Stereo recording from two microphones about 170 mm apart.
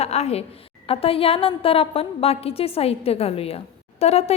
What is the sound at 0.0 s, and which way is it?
A woman's voice, 40° left (ahead or behind).